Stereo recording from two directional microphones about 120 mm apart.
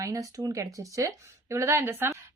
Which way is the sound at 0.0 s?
30° right (ahead or behind).